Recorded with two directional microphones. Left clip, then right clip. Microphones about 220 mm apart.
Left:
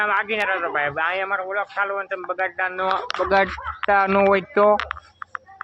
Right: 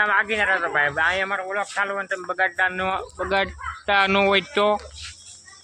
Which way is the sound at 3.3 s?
Centre (ahead or behind).